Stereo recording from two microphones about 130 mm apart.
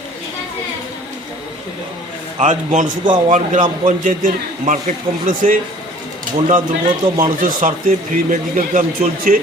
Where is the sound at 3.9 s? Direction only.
90° right.